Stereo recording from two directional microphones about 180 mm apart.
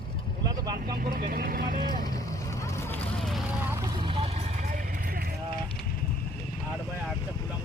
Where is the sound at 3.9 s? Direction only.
30° right (ahead or behind); by 5.3 s 55° right (ahead or behind).